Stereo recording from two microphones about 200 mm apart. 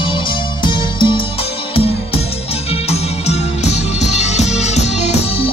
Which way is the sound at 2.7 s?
30° left (ahead or behind).